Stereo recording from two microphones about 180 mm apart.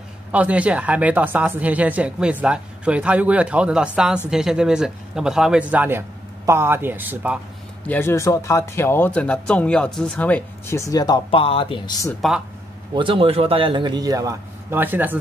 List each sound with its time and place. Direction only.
0.3 s speech: 10° right (ahead or behind)
7.8 s speech: 10° left (ahead or behind); by 12.1 s 25° left (ahead or behind)
12.9 s a man's voice: 30° right (ahead or behind); by 15.1 s 10° right (ahead or behind)